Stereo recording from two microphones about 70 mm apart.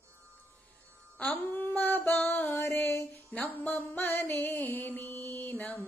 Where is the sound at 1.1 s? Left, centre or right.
Left.